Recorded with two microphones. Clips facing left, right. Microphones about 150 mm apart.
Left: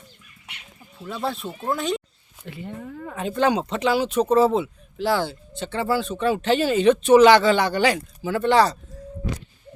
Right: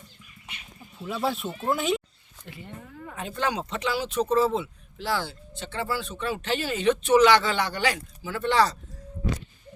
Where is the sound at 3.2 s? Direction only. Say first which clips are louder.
Left 8 dB; 25° left (ahead or behind).